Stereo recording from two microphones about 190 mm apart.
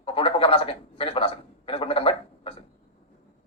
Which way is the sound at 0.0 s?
30° left (ahead or behind).